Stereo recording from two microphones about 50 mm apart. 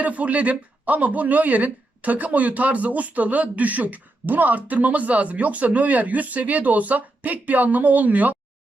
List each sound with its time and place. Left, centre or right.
0.0 s speech: right